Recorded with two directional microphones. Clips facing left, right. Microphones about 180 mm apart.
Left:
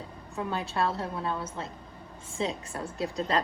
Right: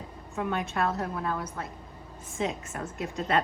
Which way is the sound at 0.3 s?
30° left (ahead or behind).